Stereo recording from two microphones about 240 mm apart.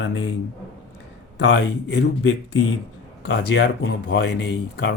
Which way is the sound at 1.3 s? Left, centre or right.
Left.